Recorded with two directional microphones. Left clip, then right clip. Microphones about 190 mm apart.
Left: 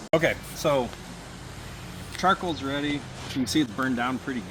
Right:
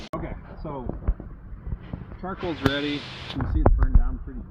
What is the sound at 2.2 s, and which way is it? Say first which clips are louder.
Speech: left 13 dB; 35° left (ahead or behind).